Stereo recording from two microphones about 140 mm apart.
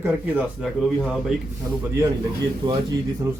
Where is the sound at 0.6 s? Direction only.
Centre (ahead or behind).